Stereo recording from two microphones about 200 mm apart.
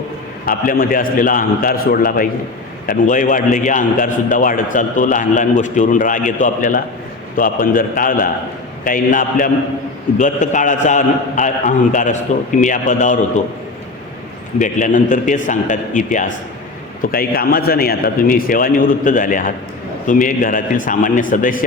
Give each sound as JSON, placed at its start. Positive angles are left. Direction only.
{"t": 0.4, "sound": "a man's voice", "side_deg": 45}
{"t": 14.6, "sound": "a man's voice", "side_deg": 40}